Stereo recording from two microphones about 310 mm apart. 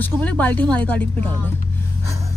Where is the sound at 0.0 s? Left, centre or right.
Centre.